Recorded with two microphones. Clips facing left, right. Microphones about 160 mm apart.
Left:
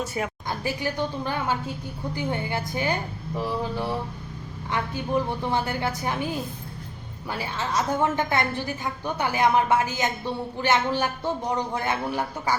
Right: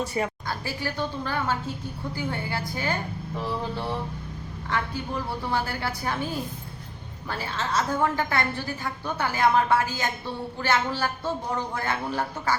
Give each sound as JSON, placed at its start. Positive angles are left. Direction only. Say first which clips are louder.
{"t": 0.0, "sound": "a woman's voice", "louder": "right 1 dB", "side_deg": 0}
{"t": 0.4, "sound": "a woman's voice", "louder": "left 3 dB", "side_deg": 20}
{"t": 4.7, "sound": "a man's voice", "louder": "left 4 dB", "side_deg": 20}